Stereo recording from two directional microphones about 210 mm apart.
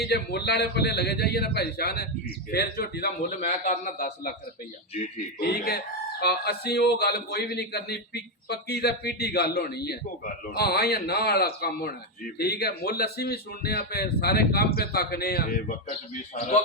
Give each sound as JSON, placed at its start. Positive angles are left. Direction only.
{"t": 0.0, "sound": "speech", "side_deg": 50}
{"t": 5.4, "sound": "speech", "side_deg": 50}